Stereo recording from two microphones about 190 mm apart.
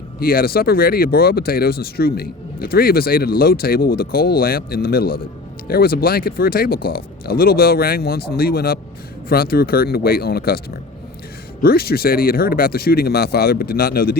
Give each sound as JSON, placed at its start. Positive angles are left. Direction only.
{"t": 0.2, "sound": "speech", "side_deg": 50}
{"t": 11.6, "sound": "speech", "side_deg": 55}